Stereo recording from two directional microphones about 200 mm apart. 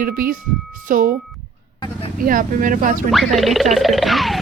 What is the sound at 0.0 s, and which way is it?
Speech, 45° right (ahead or behind).